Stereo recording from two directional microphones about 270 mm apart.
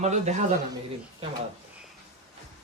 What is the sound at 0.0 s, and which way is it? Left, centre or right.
Speech, right.